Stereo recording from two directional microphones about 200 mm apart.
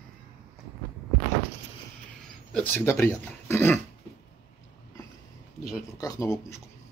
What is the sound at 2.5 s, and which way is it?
Speech, 10° left (ahead or behind).